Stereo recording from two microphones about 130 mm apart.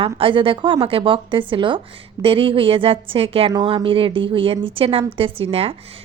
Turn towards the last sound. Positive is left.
turn(degrees=-50)  # may be behind; listen again after turning